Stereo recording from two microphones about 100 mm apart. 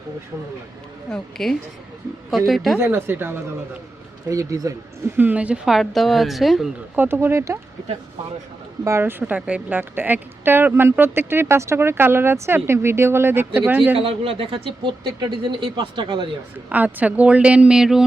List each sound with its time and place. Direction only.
1.1 s speech: 5° left (ahead or behind)
2.7 s a woman's voice: 25° right (ahead or behind)
4.3 s speech: 35° right (ahead or behind)
5.1 s speech: 15° right (ahead or behind); by 6.7 s centre (ahead or behind)
6.9 s a woman's voice: 20° right (ahead or behind)
8.8 s a woman's voice: 30° right (ahead or behind)
13.9 s speech: 75° right (ahead or behind); by 16.2 s 50° right (ahead or behind)
16.6 s speech: 15° right (ahead or behind)